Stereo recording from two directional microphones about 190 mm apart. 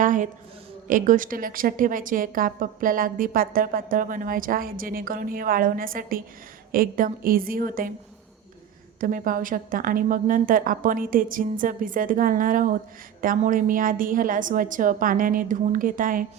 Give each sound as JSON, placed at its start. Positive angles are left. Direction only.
{"t": 0.0, "sound": "a woman's voice", "side_deg": -45}
{"t": 9.0, "sound": "a woman's voice", "side_deg": -45}